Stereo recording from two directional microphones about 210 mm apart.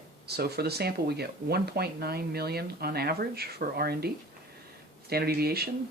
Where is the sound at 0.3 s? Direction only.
50° right (ahead or behind).